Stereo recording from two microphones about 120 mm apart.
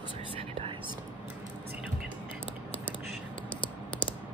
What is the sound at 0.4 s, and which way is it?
Whispering, 45° right (ahead or behind).